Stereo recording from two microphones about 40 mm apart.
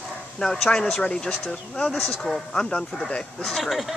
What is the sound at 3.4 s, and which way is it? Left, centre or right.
Speech, centre.